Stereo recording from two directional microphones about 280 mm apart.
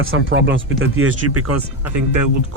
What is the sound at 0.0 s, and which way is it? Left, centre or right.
Speech, right.